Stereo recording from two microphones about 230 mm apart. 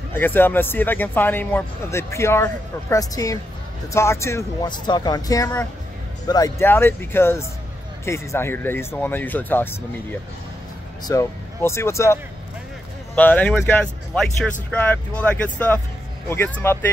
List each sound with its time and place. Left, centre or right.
0.1 s speech: centre
11.1 s speech: centre